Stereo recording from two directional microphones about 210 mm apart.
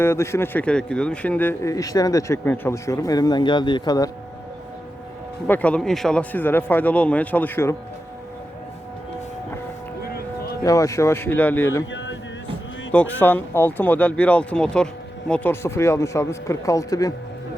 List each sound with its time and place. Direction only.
0.0 s speech: 10° left (ahead or behind)
5.5 s speech: 5° left (ahead or behind)
10.6 s speech: 15° left (ahead or behind)
11.9 s a sound: 60° left (ahead or behind)
12.9 s speech: 5° left (ahead or behind)